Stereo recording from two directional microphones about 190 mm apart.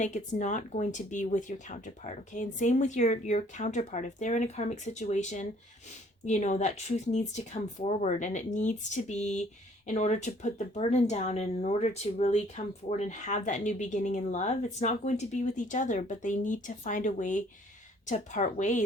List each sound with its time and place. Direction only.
0.0 s speech: 40° left (ahead or behind)